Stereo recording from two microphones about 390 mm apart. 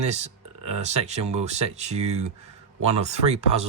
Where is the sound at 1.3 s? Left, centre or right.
Centre.